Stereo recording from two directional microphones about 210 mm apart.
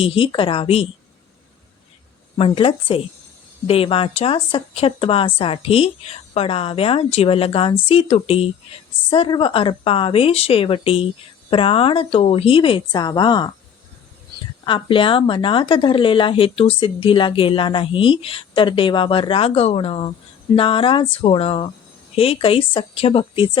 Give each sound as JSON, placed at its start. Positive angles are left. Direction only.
{"t": 0.0, "sound": "a woman's voice", "side_deg": 25}
{"t": 2.4, "sound": "a woman's voice", "side_deg": 25}
{"t": 14.6, "sound": "a woman's voice", "side_deg": 25}